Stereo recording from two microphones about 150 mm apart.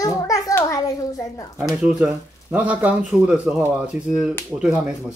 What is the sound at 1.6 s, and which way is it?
Speech, 5° right (ahead or behind).